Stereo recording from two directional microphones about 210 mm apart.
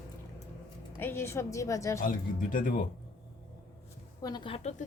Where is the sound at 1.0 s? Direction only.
10° left (ahead or behind).